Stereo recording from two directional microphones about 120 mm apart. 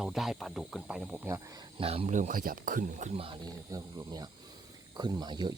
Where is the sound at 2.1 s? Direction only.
90° right.